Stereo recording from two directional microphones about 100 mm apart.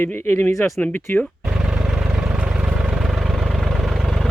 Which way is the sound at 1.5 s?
10° right (ahead or behind).